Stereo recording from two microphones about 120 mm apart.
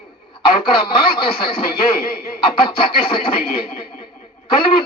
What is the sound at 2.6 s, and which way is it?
Speech, 45° left (ahead or behind).